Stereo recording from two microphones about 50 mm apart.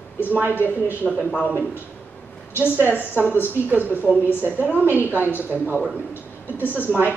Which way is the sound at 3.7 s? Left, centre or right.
Right.